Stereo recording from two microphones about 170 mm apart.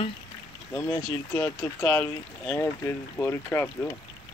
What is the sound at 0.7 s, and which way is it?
Speech, 10° left (ahead or behind).